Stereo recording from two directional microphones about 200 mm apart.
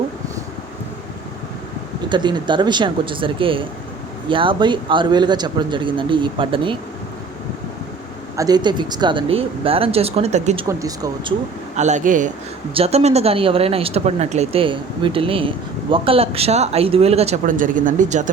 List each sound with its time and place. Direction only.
2.0 s speech: 20° right (ahead or behind)
8.4 s speech: 20° right (ahead or behind)
10.7 s speech: 15° right (ahead or behind)
11.8 s speech: 35° right (ahead or behind)